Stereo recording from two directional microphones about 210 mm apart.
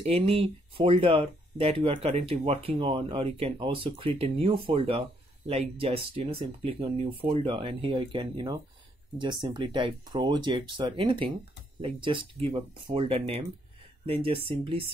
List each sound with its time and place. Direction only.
0.0 s speech: 30° right (ahead or behind)